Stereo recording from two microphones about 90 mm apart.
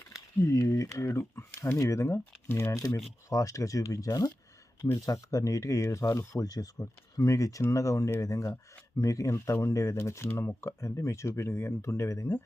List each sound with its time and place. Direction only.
0.3 s speech: 35° left (ahead or behind)
2.7 s speech: 40° left (ahead or behind)